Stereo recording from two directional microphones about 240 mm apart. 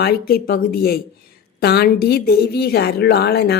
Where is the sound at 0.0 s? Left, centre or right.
Left.